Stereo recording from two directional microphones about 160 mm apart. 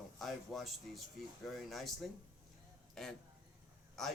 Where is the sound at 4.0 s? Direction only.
Centre (ahead or behind).